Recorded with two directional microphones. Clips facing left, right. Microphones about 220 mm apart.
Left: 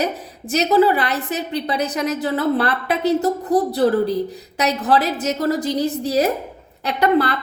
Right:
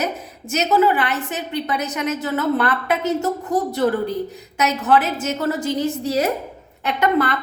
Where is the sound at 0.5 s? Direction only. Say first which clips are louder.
Left 2 dB; 35° left (ahead or behind).